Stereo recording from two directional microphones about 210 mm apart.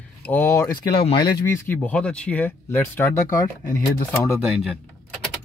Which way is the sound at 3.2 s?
40° left (ahead or behind).